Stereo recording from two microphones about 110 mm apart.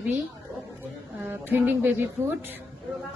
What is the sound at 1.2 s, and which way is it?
A woman's voice, 15° right (ahead or behind).